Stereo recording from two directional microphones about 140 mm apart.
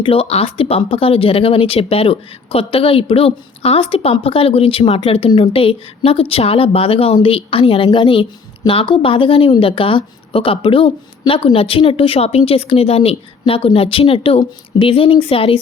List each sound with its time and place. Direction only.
0.0 s speech: 40° left (ahead or behind)